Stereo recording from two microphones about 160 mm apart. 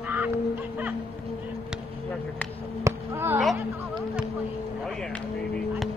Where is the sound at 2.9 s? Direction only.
15° right (ahead or behind).